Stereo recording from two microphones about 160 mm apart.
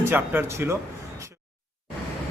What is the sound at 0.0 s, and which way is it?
Speech, 15° right (ahead or behind).